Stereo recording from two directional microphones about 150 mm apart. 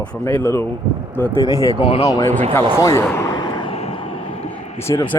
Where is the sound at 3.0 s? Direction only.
20° left (ahead or behind).